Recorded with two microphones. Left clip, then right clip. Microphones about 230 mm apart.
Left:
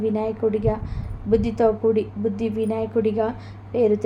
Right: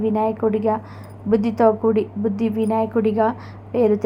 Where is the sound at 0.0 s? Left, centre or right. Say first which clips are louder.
Right 3 dB; centre.